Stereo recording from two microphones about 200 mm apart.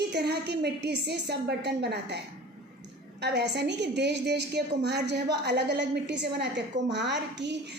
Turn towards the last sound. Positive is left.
turn(degrees=-60)  # may be behind; listen again after turning